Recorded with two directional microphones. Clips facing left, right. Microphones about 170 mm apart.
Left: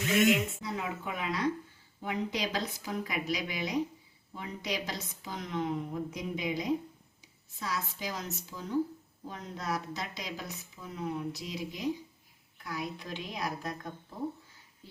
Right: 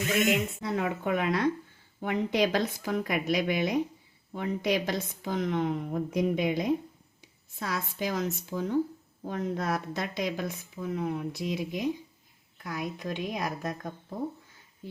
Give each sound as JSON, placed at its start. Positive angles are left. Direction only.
{"t": 0.6, "sound": "a woman's voice", "side_deg": -60}